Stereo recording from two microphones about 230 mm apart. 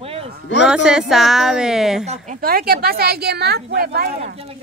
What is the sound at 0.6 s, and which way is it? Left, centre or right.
Speech, centre.